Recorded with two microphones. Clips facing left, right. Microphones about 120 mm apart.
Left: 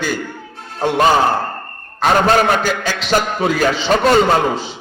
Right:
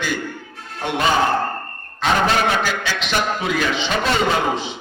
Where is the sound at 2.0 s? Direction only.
45° left (ahead or behind).